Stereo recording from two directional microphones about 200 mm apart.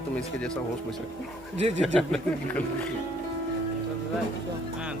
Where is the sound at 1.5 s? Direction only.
30° right (ahead or behind).